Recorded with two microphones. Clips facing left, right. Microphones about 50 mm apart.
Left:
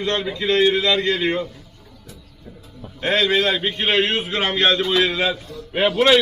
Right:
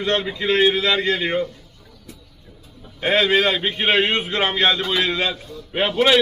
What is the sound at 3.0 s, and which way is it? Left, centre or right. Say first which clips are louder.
A man's voice: right 1 dB; centre.